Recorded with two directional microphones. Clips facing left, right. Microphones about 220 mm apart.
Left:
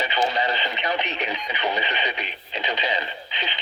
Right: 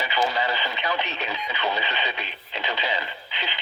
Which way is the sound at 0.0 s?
20° left (ahead or behind).